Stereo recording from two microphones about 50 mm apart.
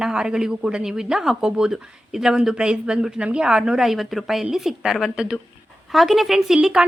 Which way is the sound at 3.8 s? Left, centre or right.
Centre.